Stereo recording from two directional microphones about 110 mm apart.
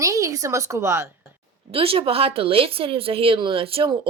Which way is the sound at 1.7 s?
60° right (ahead or behind).